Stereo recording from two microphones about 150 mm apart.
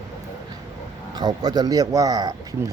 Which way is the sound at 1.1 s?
25° right (ahead or behind).